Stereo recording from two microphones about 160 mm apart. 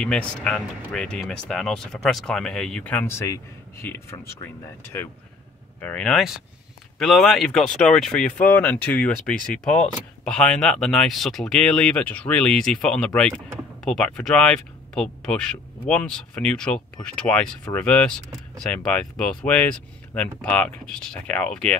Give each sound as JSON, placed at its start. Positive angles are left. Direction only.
{"t": 0.0, "sound": "speech", "side_deg": 5}
{"t": 5.8, "sound": "speech", "side_deg": 10}